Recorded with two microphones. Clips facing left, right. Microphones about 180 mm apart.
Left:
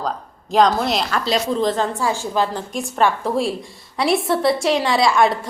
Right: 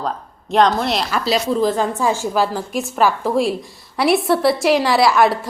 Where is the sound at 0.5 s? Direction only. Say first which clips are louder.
Even; centre (ahead or behind).